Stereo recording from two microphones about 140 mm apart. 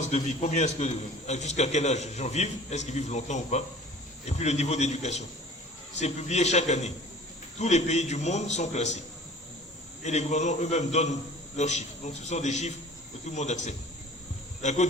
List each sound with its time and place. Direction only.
0.0 s a man's voice: 55° left (ahead or behind)
10.0 s a man's voice: 55° left (ahead or behind)